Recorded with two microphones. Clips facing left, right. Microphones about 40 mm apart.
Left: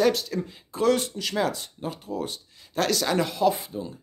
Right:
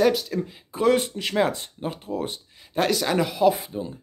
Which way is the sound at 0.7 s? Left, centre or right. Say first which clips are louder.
Right 2 dB; centre.